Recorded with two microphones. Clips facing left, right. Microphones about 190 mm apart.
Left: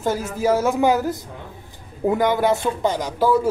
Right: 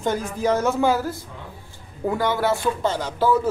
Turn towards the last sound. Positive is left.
turn(degrees=10)  # may be behind; listen again after turning